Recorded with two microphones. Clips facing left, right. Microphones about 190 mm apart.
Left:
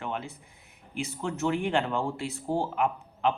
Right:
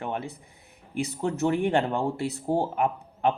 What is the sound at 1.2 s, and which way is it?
Speech, 35° right (ahead or behind).